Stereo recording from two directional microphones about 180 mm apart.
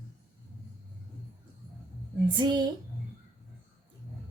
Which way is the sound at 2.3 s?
25° right (ahead or behind).